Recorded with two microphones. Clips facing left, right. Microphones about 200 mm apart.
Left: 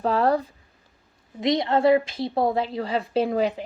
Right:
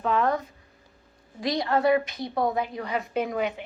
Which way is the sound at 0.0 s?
35° left (ahead or behind).